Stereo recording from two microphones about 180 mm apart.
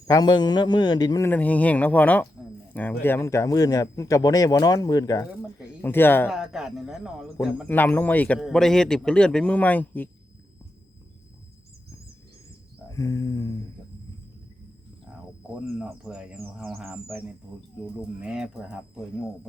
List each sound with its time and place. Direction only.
0.1 s speech: 20° left (ahead or behind)
1.3 s a man's voice: 10° left (ahead or behind)
5.3 s speech: 10° right (ahead or behind)
5.8 s a man's voice: 10° left (ahead or behind)
6.3 s speech: 5° right (ahead or behind)
7.3 s a man's voice: 10° left (ahead or behind)
12.9 s a sound: 20° left (ahead or behind)
15.6 s speech: 5° right (ahead or behind)